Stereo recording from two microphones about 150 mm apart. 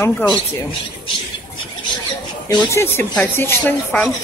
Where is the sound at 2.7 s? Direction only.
15° left (ahead or behind).